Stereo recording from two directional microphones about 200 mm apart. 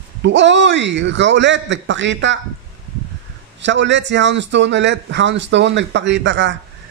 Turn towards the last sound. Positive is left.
turn(degrees=-65)  # may be behind; listen again after turning